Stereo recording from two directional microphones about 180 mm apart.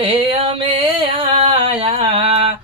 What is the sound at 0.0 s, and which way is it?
Music, 30° right (ahead or behind).